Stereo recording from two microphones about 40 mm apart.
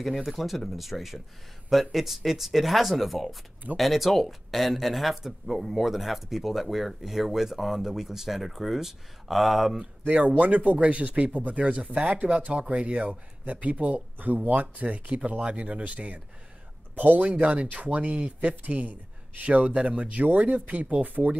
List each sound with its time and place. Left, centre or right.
0.0 s speech: centre
10.0 s speech: right
12.3 s speech: right
14.1 s speech: right
18.6 s speech: right
19.8 s speech: right
20.2 s speech: right